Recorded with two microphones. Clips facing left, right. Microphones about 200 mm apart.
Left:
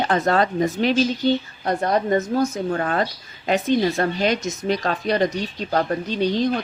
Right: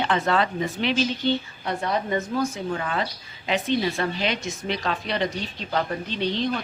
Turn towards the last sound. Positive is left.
turn(degrees=45)  # may be behind; listen again after turning